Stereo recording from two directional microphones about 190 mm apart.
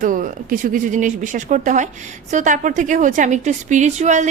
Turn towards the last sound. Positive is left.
turn(degrees=-40)  # may be behind; listen again after turning